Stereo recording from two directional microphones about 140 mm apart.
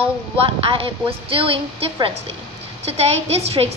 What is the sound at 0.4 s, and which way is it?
A woman's voice, 40° right (ahead or behind).